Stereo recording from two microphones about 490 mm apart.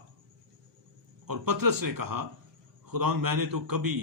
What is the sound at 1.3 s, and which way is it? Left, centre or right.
A man's voice, right.